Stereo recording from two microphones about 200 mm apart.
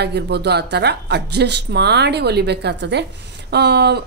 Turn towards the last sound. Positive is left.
turn(degrees=-55)  # may be behind; listen again after turning